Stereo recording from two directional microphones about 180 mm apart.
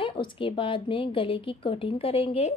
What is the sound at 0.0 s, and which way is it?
Speech, 30° left (ahead or behind).